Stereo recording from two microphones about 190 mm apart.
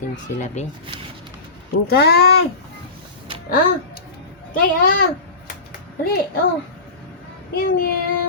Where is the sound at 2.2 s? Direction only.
90° left.